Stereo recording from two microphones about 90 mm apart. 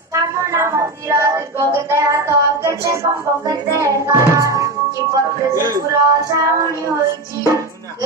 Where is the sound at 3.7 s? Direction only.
35° right (ahead or behind).